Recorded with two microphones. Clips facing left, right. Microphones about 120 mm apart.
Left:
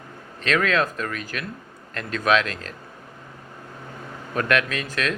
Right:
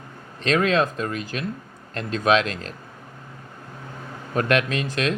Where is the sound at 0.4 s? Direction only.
30° right (ahead or behind).